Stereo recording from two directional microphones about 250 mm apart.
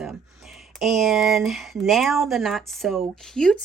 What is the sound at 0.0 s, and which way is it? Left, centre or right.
Speech, centre.